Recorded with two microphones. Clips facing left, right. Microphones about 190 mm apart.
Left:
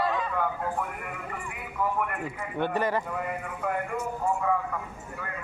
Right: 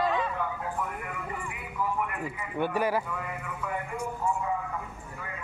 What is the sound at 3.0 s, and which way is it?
Speech, 50° left (ahead or behind).